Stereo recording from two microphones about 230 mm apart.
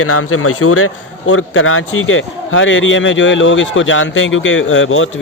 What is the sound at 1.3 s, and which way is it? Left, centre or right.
A man's voice, left.